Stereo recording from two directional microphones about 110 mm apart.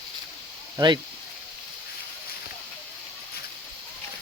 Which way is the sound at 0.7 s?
40° right (ahead or behind).